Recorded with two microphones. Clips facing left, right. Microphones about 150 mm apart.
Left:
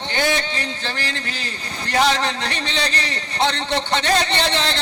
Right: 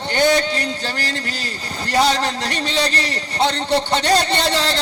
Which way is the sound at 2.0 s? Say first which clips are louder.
Right 1 dB; 35° right (ahead or behind).